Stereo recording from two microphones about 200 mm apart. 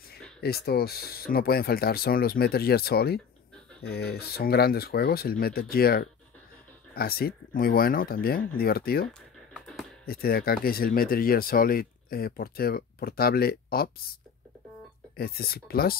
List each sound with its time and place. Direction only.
0.4 s speech: 50° left (ahead or behind)
9.5 s a sound: centre (ahead or behind)
10.0 s speech: 50° left (ahead or behind)
15.1 s speech: 50° left (ahead or behind)